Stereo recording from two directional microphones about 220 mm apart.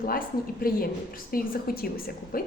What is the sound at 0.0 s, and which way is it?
A woman's voice, 40° left (ahead or behind).